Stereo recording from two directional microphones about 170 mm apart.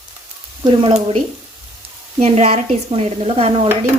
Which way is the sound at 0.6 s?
30° right (ahead or behind).